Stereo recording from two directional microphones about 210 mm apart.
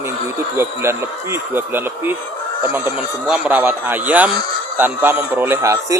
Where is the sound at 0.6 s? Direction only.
10° right (ahead or behind).